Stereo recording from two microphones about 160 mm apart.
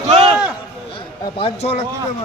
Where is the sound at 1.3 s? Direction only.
35° left (ahead or behind).